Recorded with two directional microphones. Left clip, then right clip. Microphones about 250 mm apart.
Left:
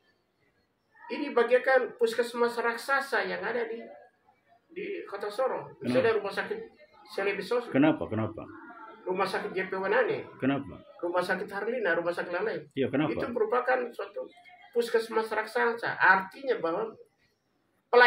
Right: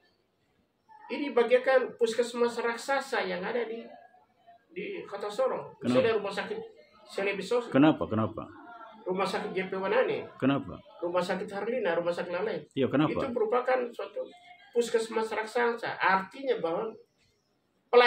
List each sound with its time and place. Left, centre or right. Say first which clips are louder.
1.0 s speech: even; centre
4.7 s speech: left 1 dB; centre
7.7 s speech: right 2 dB; centre
9.0 s speech: left 1 dB; centre
12.7 s speech: right 3 dB; centre
13.1 s speech: even; centre